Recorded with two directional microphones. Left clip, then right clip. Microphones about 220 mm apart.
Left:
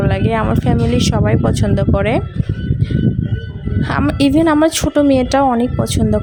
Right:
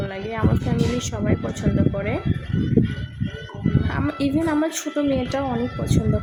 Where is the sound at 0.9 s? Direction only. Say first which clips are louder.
Left 9 dB; 45° left (ahead or behind).